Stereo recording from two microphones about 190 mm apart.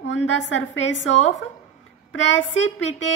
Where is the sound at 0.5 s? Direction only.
75° left (ahead or behind).